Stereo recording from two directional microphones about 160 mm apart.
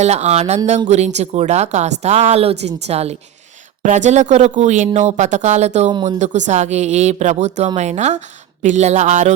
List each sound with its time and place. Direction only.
0.0 s speech: 45° right (ahead or behind)